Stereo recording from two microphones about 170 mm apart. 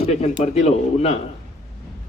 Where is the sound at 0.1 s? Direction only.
40° left (ahead or behind).